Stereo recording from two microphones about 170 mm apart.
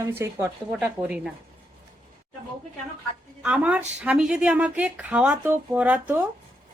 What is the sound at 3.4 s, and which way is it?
A woman's voice, 5° right (ahead or behind).